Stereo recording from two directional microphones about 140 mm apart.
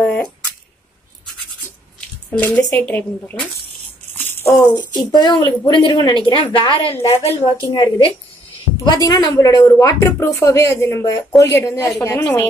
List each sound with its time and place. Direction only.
0.0 s speech: 5° left (ahead or behind)
2.0 s speech: 10° left (ahead or behind)
4.1 s rattle: 15° left (ahead or behind)
4.6 s a woman's voice: 30° left (ahead or behind); by 7.3 s 45° left (ahead or behind)
7.7 s a woman's voice: 35° left (ahead or behind)